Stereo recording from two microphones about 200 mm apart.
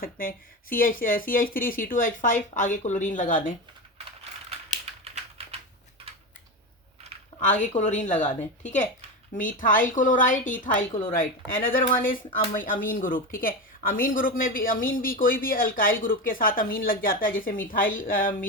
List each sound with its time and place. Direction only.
0.0 s speech: 45° left (ahead or behind)
3.9 s typing: 30° right (ahead or behind)
7.4 s a woman's voice: 40° left (ahead or behind)